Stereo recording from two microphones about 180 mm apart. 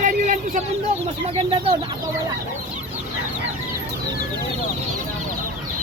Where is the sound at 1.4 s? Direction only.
30° right (ahead or behind).